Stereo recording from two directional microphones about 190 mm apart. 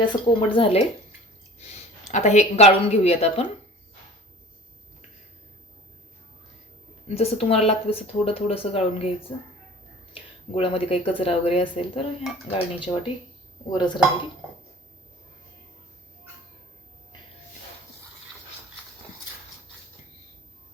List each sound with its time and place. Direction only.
0.1 s speech: 30° left (ahead or behind)
7.1 s speech: 35° left (ahead or behind)
10.5 s speech: 30° left (ahead or behind)